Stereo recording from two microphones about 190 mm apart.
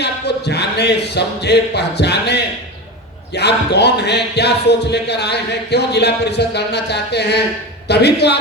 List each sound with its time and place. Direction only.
0.0 s speech: 60° left (ahead or behind)